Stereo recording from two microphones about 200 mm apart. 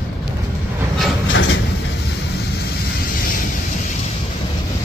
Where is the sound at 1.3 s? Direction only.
70° left (ahead or behind).